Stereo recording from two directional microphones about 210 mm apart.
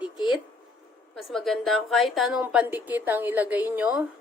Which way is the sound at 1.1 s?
Centre (ahead or behind).